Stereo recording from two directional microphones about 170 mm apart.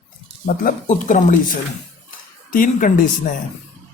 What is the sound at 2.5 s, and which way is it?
Speech, 50° left (ahead or behind).